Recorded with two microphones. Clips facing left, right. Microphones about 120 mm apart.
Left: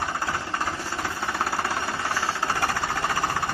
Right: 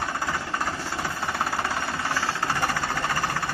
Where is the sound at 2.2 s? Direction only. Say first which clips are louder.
Left 1 dB; 10° left (ahead or behind).